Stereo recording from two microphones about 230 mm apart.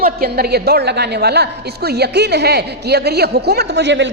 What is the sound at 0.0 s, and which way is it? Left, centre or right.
A woman's voice, right.